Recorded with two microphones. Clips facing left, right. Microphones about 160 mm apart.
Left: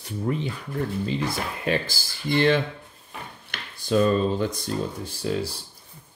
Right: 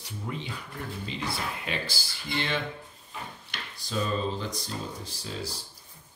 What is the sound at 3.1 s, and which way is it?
Wood, 60° left (ahead or behind).